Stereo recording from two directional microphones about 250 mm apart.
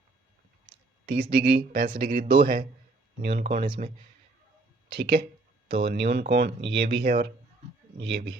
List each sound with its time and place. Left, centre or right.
1.1 s speech: right
3.4 s speech: right
4.9 s speech: right
5.6 s speech: right
6.0 s speech: right